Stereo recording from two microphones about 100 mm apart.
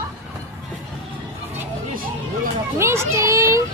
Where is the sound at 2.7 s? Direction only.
25° right (ahead or behind).